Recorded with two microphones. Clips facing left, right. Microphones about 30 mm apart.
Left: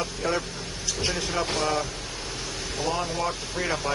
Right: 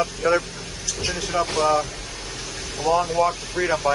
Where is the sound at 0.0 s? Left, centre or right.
Centre.